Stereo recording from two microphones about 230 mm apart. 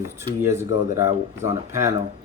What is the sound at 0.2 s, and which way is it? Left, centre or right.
Speech, centre.